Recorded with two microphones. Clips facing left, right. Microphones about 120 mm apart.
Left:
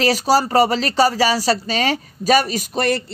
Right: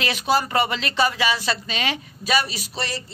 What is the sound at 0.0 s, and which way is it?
Speech, 35° left (ahead or behind).